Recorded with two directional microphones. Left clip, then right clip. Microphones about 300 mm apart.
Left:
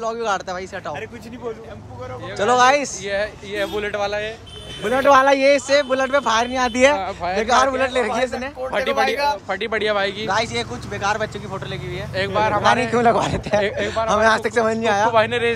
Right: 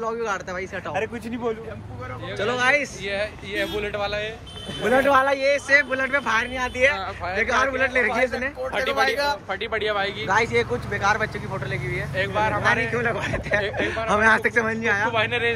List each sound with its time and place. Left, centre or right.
0.0 s speech: centre
2.3 s speech: centre
3.1 s speech: left
5.7 s speech: centre
6.5 s speech: left
7.4 s speech: centre
8.7 s speech: left
10.2 s speech: centre
12.2 s speech: left
12.9 s speech: centre
13.6 s speech: left
13.8 s speech: centre
15.1 s speech: left